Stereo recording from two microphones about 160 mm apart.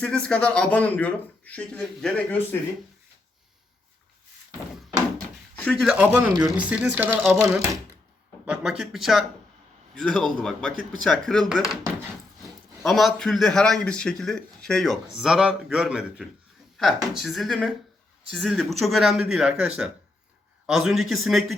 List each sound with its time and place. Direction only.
0.0 s speech: 5° left (ahead or behind)
5.1 s drawer open or close: 5° left (ahead or behind)
5.9 s speech: 10° right (ahead or behind)
8.8 s a man's voice: centre (ahead or behind)
12.8 s a man's voice: centre (ahead or behind)